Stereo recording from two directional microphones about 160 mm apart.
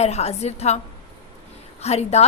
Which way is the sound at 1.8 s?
40° left (ahead or behind).